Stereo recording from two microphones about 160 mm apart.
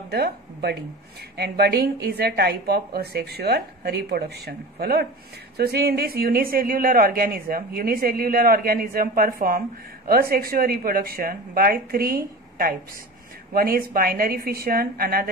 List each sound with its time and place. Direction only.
0.1 s a woman's voice: 90° right; by 15.2 s 65° right (ahead or behind)